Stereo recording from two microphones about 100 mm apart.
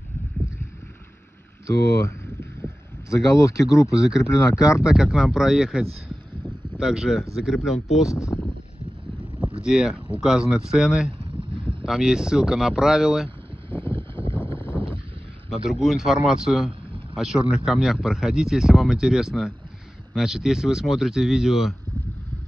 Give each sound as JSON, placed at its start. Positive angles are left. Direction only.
{"t": 2.6, "sound": "a sound", "side_deg": 30}
{"t": 4.2, "sound": "speech", "side_deg": 30}
{"t": 4.8, "sound": "speech", "side_deg": -5}
{"t": 8.1, "sound": "speech", "side_deg": 30}
{"t": 9.6, "sound": "speech", "side_deg": -5}
{"t": 13.7, "sound": "boat", "side_deg": 20}
{"t": 13.9, "sound": "a sound", "side_deg": -60}
{"t": 14.7, "sound": "a sound", "side_deg": 15}
{"t": 15.5, "sound": "speech", "side_deg": -5}